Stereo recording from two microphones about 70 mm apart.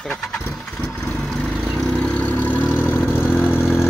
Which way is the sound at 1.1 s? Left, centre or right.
Centre.